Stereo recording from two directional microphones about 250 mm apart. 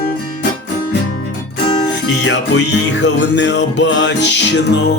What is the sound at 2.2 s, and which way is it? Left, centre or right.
Music, left.